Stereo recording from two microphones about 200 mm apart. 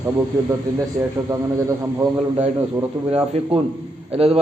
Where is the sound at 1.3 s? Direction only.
15° right (ahead or behind).